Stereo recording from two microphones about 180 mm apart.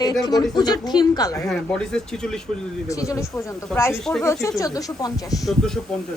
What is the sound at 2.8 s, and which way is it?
Speech, 15° left (ahead or behind).